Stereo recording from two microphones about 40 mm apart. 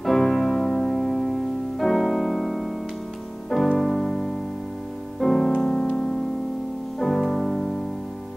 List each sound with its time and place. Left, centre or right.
0.0 s music: centre
3.7 s piano: centre
5.2 s music: centre
5.6 s piano: centre
7.0 s music: centre